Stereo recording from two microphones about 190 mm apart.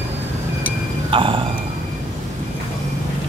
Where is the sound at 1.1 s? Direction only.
25° right (ahead or behind).